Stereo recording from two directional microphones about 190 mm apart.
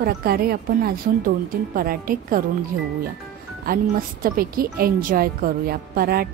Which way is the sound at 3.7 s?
50° right (ahead or behind).